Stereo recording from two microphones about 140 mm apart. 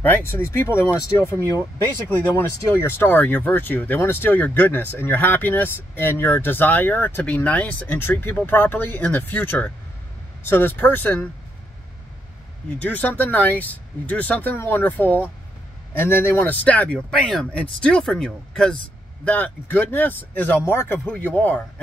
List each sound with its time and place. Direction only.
0.0 s speech: 15° left (ahead or behind)
12.6 s speech: 10° left (ahead or behind)